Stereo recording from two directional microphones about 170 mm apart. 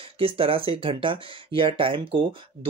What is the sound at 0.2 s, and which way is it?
Speech, 35° right (ahead or behind).